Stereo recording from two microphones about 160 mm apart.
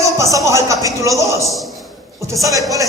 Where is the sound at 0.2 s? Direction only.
20° right (ahead or behind).